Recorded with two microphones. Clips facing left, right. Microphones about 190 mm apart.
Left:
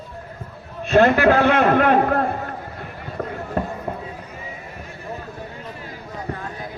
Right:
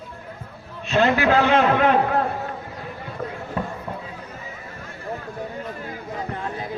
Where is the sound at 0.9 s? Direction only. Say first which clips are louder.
Left 4 dB; 55° left (ahead or behind).